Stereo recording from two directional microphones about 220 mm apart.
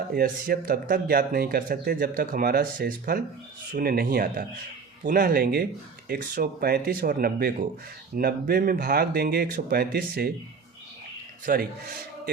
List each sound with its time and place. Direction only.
0.1 s speech: 40° right (ahead or behind)
11.5 s speech: 45° right (ahead or behind)